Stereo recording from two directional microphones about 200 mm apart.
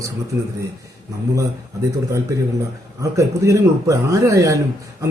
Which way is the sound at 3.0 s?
15° right (ahead or behind).